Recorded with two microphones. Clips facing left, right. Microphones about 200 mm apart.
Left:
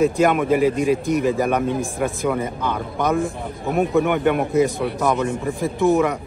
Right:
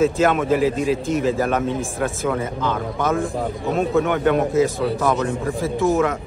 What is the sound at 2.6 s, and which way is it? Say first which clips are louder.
Speech: even; 15° left (ahead or behind).